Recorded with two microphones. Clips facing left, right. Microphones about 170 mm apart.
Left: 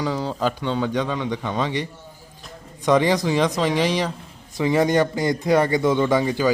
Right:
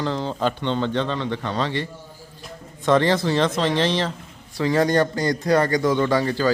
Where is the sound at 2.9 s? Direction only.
15° left (ahead or behind).